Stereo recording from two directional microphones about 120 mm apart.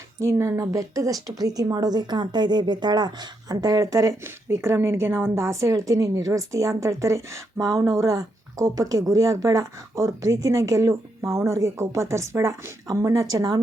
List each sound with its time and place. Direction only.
0.2 s speech: 20° right (ahead or behind)